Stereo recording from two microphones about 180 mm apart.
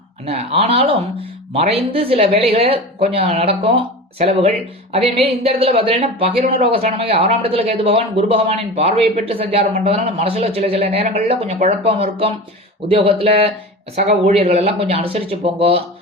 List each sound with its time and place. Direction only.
0.3 s speech: 35° right (ahead or behind)